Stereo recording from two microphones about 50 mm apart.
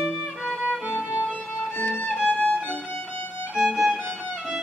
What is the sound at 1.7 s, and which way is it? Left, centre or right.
Music, left.